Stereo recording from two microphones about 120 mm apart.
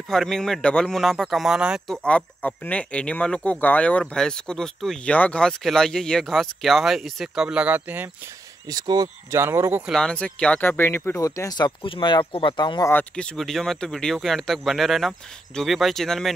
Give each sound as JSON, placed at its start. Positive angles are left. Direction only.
{"t": 0.1, "sound": "speech", "side_deg": 5}
{"t": 2.0, "sound": "speech", "side_deg": 10}
{"t": 8.6, "sound": "speech", "side_deg": -35}
{"t": 9.3, "sound": "speech", "side_deg": -20}
{"t": 9.8, "sound": "speech", "side_deg": 5}
{"t": 11.1, "sound": "speech", "side_deg": 25}
{"t": 13.1, "sound": "speech", "side_deg": 5}